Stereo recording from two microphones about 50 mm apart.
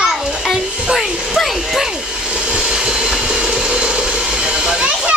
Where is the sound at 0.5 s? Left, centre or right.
Centre.